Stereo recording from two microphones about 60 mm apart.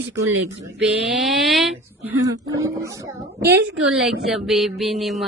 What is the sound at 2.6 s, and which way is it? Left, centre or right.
Speech, right.